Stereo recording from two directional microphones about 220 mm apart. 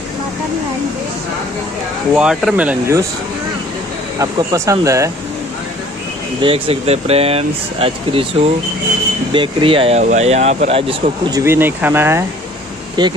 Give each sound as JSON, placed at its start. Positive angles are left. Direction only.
{"t": 2.1, "sound": "speech", "side_deg": -5}
{"t": 4.2, "sound": "speech", "side_deg": -15}
{"t": 6.4, "sound": "speech", "side_deg": -25}